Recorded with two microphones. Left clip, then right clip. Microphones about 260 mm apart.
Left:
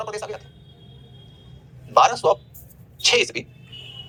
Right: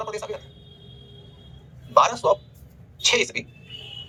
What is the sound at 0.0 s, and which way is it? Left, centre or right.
Speech, centre.